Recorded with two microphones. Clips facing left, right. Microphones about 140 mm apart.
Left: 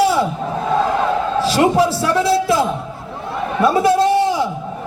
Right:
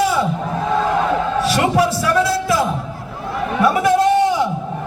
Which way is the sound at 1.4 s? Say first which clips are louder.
Left 3 dB; 25° left (ahead or behind).